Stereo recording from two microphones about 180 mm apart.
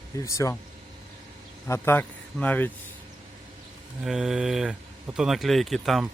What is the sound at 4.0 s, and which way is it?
Speech, centre (ahead or behind).